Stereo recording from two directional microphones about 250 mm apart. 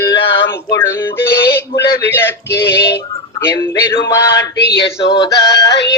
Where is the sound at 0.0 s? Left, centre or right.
Centre.